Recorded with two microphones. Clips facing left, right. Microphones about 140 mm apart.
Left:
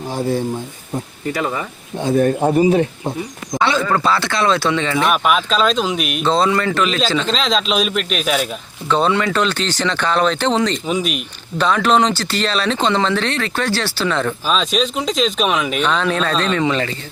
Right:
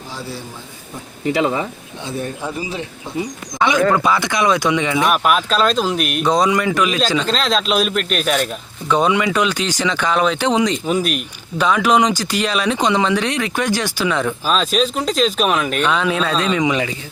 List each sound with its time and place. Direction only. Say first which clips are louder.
0.2 s speech: left 12 dB; 50° left (ahead or behind)
1.4 s speech: right 4 dB; 20° right (ahead or behind)
2.0 s speech: left 10 dB; 50° left (ahead or behind)
3.2 s speech: right 2 dB; 15° right (ahead or behind)
5.1 s a man's voice: even; centre (ahead or behind)
6.2 s a man's voice: even; 15° right (ahead or behind); by 8.4 s centre (ahead or behind)
8.9 s speech: even; 10° right (ahead or behind)